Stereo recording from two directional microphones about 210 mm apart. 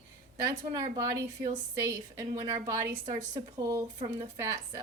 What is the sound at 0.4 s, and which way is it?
A woman's voice, 15° right (ahead or behind).